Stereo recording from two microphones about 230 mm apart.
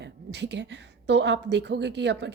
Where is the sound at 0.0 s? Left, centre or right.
Right.